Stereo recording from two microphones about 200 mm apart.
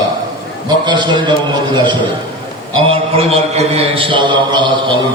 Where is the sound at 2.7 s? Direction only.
30° right (ahead or behind).